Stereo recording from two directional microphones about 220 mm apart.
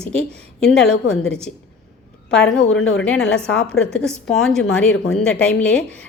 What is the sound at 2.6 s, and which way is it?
Speech, 65° left (ahead or behind).